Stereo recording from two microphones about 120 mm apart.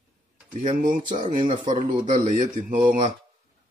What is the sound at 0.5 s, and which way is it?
Speech, 90° right.